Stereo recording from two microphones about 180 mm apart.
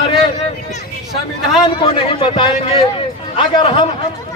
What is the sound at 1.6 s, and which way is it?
A man's voice, 30° left (ahead or behind).